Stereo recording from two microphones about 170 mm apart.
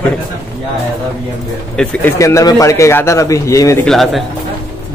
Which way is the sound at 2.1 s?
20° left (ahead or behind).